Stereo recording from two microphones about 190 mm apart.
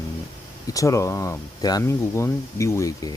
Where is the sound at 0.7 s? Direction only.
15° left (ahead or behind).